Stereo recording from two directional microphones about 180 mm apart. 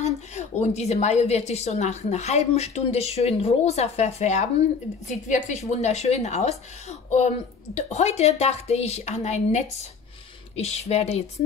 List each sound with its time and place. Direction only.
0.0 s speech: 40° left (ahead or behind)